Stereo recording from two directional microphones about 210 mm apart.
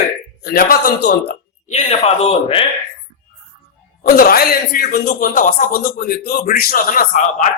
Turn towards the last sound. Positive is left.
turn(degrees=35)  # may be behind; listen again after turning